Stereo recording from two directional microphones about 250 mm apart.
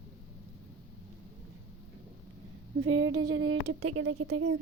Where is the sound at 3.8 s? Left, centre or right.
Right.